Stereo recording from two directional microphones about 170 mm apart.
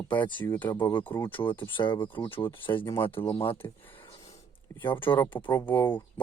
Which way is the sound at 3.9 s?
25° left (ahead or behind).